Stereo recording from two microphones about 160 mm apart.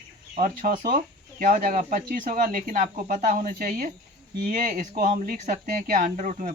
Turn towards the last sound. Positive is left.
turn(degrees=-55)  # may be behind; listen again after turning